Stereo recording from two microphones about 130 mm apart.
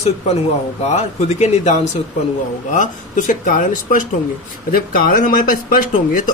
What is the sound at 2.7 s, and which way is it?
Speech, 70° left (ahead or behind).